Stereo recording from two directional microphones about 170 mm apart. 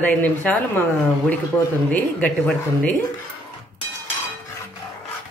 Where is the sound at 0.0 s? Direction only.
10° left (ahead or behind).